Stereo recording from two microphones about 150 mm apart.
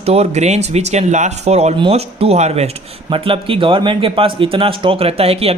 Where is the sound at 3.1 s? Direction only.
35° right (ahead or behind).